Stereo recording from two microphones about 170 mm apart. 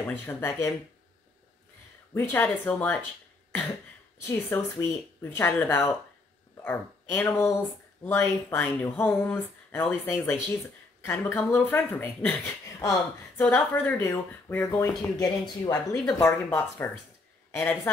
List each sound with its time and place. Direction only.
0.0 s speech: 10° left (ahead or behind)
2.1 s speech: 10° left (ahead or behind)
4.3 s speech: 15° left (ahead or behind)